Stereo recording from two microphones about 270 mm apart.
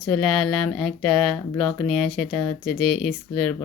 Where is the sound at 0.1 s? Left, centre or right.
Centre.